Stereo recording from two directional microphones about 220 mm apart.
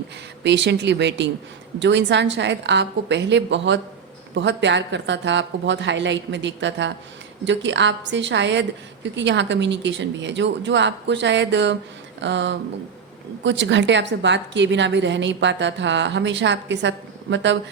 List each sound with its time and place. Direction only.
0.4 s a woman's voice: 50° right (ahead or behind)